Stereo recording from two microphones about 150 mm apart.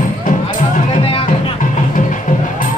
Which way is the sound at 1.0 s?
40° left (ahead or behind).